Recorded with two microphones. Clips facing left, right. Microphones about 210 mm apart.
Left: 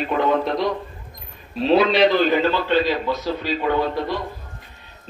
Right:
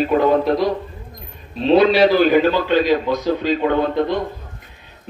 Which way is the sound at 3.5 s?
55° right (ahead or behind).